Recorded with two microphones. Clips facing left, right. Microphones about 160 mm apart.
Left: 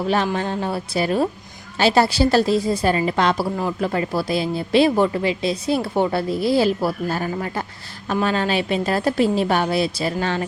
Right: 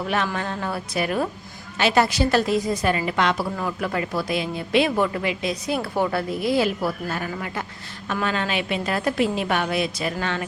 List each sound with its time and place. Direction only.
0.3 s a woman's voice: 30° left (ahead or behind)